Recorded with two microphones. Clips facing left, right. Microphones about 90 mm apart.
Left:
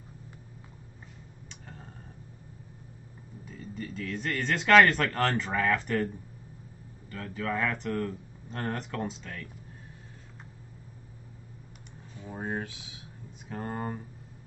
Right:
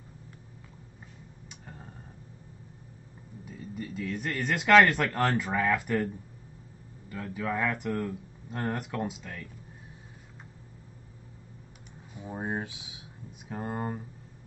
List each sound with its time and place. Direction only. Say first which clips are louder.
1.5 s tick-tock: even; 10° right (ahead or behind)
3.4 s speech: right 1 dB; 10° right (ahead or behind)
7.1 s speech: even; 10° right (ahead or behind)
12.2 s speech: right 1 dB; 15° right (ahead or behind)